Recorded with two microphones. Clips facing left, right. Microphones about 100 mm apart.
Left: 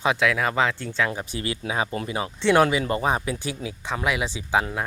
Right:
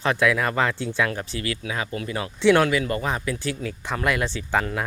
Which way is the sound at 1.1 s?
15° left (ahead or behind).